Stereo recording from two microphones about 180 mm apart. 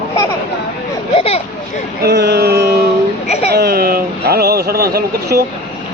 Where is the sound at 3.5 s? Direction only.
60° right (ahead or behind).